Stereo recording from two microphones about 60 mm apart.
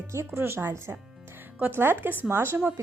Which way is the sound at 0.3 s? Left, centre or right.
Right.